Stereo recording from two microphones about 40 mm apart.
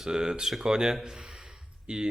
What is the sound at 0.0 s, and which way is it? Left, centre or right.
Speech, centre.